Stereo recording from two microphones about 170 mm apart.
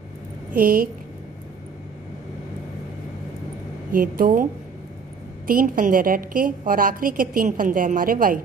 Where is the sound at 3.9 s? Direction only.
55° right (ahead or behind).